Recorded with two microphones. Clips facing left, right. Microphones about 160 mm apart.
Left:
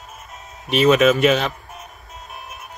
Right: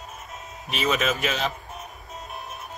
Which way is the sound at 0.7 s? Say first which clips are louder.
Left 12 dB; centre (ahead or behind).